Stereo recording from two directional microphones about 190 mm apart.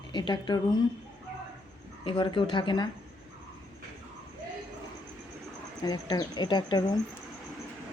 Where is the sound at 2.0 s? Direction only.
25° left (ahead or behind).